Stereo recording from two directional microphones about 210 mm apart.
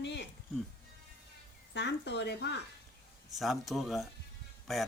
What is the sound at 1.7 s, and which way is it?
Speech, 55° left (ahead or behind).